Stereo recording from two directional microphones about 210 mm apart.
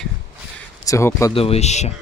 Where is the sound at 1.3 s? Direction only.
30° left (ahead or behind).